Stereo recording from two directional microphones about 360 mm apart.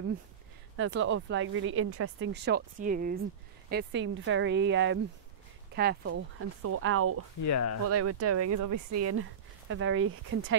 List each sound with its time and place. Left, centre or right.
0.7 s speech: right
7.4 s speech: left
7.9 s speech: right